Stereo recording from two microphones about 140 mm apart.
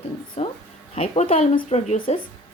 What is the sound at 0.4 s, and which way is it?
Music, 50° left (ahead or behind).